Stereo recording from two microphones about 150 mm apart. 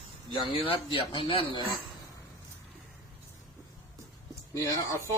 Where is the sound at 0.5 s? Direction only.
40° left (ahead or behind).